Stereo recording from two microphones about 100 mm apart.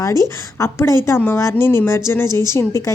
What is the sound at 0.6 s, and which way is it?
A woman's voice, 30° left (ahead or behind).